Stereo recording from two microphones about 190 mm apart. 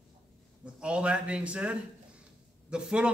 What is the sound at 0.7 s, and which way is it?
A man's voice, 5° right (ahead or behind).